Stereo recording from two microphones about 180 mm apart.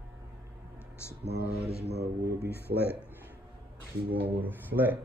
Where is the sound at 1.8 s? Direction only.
65° right (ahead or behind).